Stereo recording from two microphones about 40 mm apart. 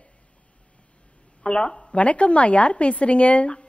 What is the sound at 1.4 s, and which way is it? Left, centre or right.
A man's voice, left.